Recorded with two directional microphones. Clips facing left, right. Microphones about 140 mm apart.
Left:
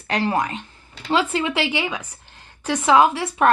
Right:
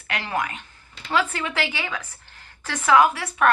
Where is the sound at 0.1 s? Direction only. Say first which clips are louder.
Left 6 dB; 35° left (ahead or behind).